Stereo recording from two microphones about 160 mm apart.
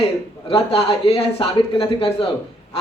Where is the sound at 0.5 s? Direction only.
35° left (ahead or behind).